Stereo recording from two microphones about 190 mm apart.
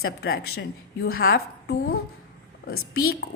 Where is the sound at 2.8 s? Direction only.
90° left.